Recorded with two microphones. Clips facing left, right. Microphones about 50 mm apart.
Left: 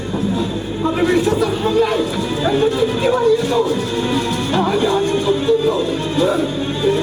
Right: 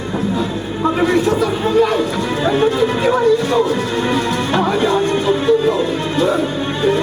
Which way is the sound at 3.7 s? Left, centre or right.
Right.